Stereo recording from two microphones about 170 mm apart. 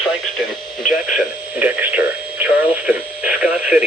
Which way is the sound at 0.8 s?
50° left (ahead or behind).